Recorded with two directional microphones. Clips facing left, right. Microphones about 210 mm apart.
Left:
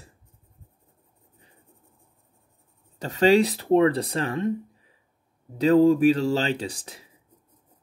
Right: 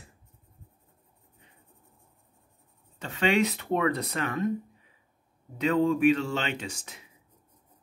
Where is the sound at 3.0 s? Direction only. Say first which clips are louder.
Left 7 dB; 40° left (ahead or behind).